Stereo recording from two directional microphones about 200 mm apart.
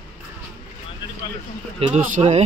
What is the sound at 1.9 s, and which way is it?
Speech, 35° right (ahead or behind).